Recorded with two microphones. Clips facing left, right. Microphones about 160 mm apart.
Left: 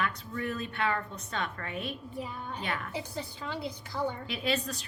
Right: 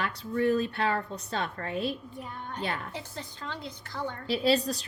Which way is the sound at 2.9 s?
10° left (ahead or behind).